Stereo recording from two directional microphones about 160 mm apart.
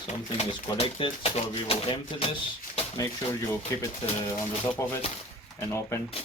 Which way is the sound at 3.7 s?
20° left (ahead or behind).